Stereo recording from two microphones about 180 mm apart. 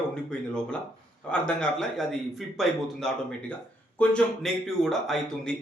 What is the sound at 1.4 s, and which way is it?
Speech, 5° left (ahead or behind).